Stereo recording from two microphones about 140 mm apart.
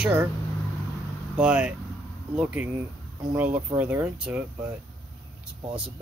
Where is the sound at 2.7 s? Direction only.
25° right (ahead or behind).